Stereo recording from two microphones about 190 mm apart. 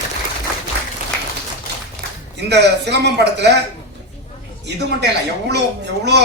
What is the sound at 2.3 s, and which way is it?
A man's voice, 65° right (ahead or behind).